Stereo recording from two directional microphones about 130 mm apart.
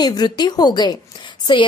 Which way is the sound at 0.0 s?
30° left (ahead or behind).